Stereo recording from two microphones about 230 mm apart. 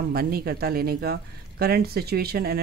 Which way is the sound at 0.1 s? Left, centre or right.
Right.